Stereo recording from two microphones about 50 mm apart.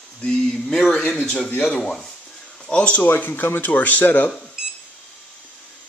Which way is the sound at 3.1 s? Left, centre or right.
Left.